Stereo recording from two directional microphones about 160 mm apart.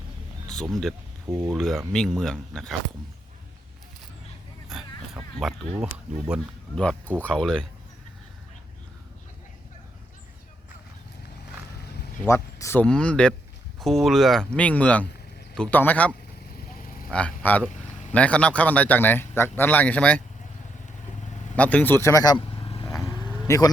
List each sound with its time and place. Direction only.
0.4 s speech: 5° left (ahead or behind)
1.3 s speech: 15° right (ahead or behind)
1.5 s speech: centre (ahead or behind)
4.7 s dog: centre (ahead or behind)
5.8 s speech: 5° right (ahead or behind)
7.2 s speech: 5° left (ahead or behind)
12.2 s a man's voice: 15° left (ahead or behind)
12.8 s a man's voice: 5° left (ahead or behind)
16.7 s vehicle: 65° left (ahead or behind)
17.1 s a man's voice: 10° left (ahead or behind)
21.5 s speech: 10° left (ahead or behind); by 22.9 s 35° left (ahead or behind)
23.0 s roaring cats: 25° left (ahead or behind)